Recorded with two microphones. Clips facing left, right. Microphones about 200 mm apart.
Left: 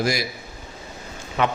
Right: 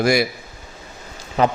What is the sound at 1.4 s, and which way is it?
Speech, 35° right (ahead or behind).